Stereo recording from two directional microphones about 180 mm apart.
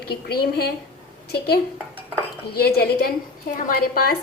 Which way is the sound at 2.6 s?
60° left (ahead or behind).